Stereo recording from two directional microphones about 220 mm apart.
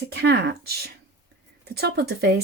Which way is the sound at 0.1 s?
50° right (ahead or behind).